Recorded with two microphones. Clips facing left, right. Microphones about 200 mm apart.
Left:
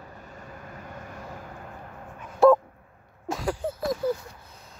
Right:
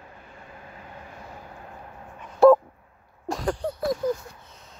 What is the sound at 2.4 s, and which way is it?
Dog, centre (ahead or behind).